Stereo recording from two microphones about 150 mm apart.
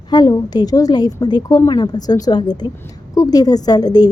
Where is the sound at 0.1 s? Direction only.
25° left (ahead or behind).